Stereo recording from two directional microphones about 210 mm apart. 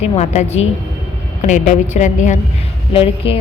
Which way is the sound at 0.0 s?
30° left (ahead or behind).